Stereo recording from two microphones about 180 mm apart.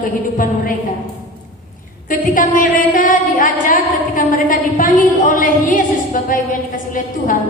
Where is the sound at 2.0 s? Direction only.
45° left (ahead or behind).